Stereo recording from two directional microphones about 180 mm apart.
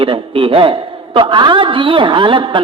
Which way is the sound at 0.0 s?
30° right (ahead or behind).